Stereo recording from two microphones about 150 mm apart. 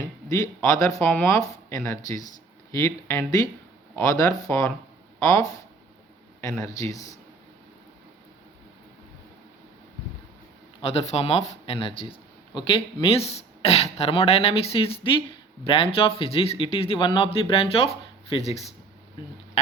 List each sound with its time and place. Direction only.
0.3 s speech: 20° left (ahead or behind)
10.8 s a man's voice: 40° left (ahead or behind)